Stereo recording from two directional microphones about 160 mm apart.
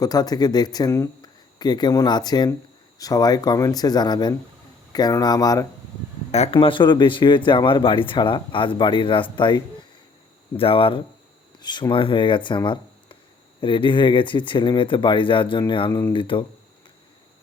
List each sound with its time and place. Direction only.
0.0 s speech: 25° left (ahead or behind)
6.3 s speech: 40° left (ahead or behind)
10.6 s speech: 35° left (ahead or behind)